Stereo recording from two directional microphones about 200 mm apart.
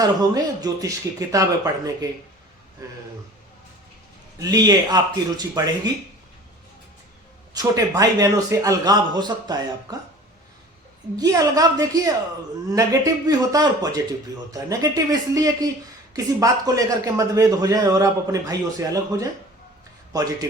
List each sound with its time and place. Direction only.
0.0 s a man's voice: 20° right (ahead or behind)
4.4 s a man's voice: 20° right (ahead or behind)
7.5 s a man's voice: 20° right (ahead or behind)
11.2 s a man's voice: 15° right (ahead or behind)